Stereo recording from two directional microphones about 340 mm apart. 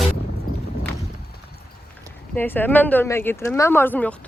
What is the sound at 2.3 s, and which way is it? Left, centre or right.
Speech, centre.